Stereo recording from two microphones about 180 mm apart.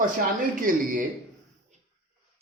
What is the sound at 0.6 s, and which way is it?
Speech, 50° right (ahead or behind).